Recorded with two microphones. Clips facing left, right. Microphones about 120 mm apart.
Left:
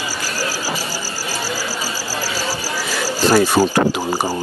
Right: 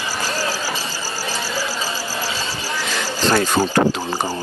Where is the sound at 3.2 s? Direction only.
10° left (ahead or behind).